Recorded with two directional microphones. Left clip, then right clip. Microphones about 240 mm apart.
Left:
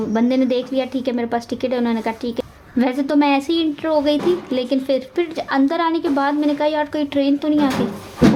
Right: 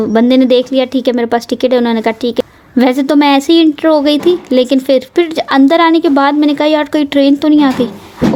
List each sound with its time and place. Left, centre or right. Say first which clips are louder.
0.1 s a woman's voice: right 10 dB; right